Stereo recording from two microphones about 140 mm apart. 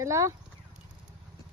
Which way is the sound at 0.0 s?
20° right (ahead or behind).